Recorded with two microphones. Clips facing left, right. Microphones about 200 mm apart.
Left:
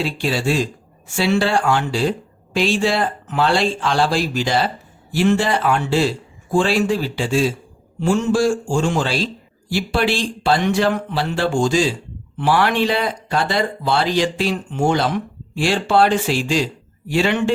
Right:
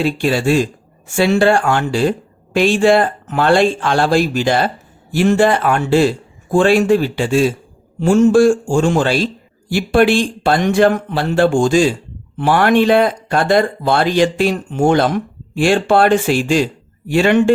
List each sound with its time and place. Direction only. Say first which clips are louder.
0.0 s speech: right 5 dB; 50° right (ahead or behind)